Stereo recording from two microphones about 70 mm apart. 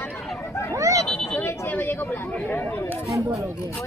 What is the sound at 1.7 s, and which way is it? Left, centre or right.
Chatter, left.